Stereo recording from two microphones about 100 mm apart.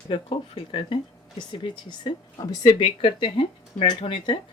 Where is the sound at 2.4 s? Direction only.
40° left (ahead or behind).